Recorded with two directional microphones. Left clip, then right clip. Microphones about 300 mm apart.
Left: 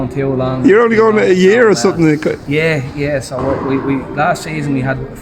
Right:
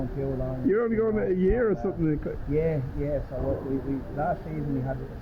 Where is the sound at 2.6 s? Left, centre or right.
Left.